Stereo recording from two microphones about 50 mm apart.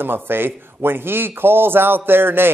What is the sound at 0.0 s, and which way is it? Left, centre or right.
A man's voice, right.